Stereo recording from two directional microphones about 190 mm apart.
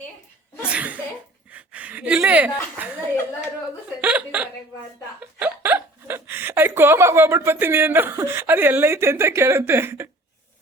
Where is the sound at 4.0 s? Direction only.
5° right (ahead or behind).